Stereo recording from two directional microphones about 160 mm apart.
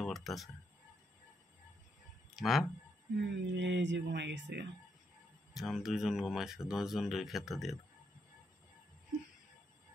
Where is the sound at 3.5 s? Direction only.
90° right.